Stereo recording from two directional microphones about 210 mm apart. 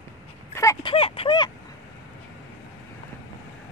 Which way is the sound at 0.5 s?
15° left (ahead or behind).